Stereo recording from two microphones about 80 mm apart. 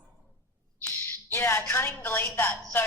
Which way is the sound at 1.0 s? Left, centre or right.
Left.